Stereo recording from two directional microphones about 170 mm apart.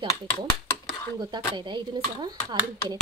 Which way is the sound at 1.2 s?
25° right (ahead or behind).